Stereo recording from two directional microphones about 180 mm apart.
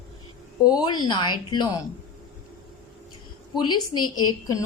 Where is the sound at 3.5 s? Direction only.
25° left (ahead or behind).